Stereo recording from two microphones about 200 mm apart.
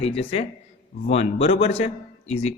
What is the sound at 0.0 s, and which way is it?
Speech, 30° left (ahead or behind).